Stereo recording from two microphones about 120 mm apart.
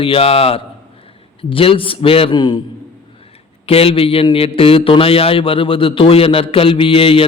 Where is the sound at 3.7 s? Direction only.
55° left (ahead or behind).